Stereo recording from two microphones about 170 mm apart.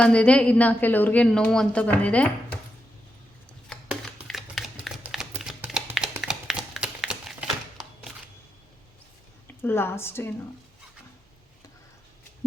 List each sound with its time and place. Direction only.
0.0 s a woman's voice: 5° left (ahead or behind)
3.7 s a sound: centre (ahead or behind)
9.6 s a woman's voice: 15° left (ahead or behind)